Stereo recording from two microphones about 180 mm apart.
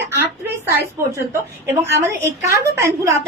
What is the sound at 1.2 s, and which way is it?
A woman's voice, 15° right (ahead or behind).